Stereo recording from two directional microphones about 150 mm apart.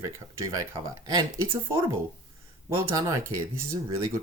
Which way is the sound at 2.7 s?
20° right (ahead or behind).